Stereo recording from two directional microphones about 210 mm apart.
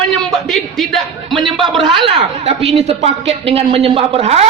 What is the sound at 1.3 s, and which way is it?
A woman's voice, 25° right (ahead or behind).